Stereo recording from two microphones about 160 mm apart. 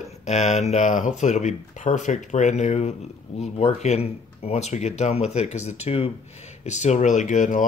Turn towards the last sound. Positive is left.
turn(degrees=55)  # may be behind; listen again after turning